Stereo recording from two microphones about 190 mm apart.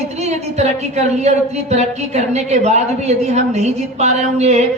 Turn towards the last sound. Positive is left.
turn(degrees=-35)  # may be behind; listen again after turning